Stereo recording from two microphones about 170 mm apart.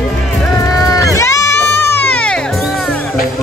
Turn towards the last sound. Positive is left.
turn(degrees=10)  # may be behind; listen again after turning